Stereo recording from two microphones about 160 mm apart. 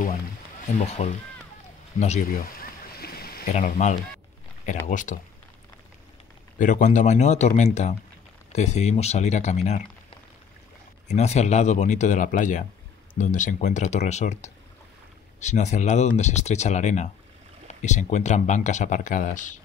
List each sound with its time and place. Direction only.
0.0 s music: 55° left (ahead or behind)
2.0 s speech: 45° left (ahead or behind)
2.5 s rowboat: 75° left (ahead or behind)
3.5 s speech: 50° left (ahead or behind)
6.6 s speech: 50° left (ahead or behind)
11.1 s speech: 45° left (ahead or behind)